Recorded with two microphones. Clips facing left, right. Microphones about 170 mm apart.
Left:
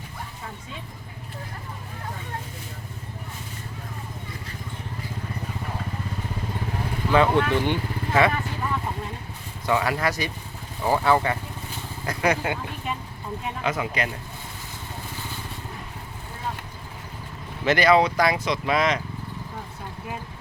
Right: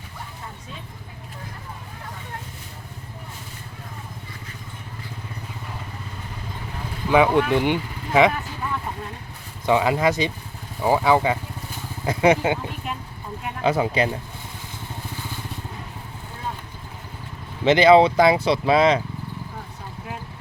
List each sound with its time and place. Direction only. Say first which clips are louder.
7.1 s speech: right 3 dB; 10° right (ahead or behind)
9.6 s speech: right 5 dB; 20° right (ahead or behind)
12.0 s speech: right 6 dB; 25° right (ahead or behind)
13.7 s speech: right 7 dB; 30° right (ahead or behind)
17.7 s speech: right 5 dB; 25° right (ahead or behind)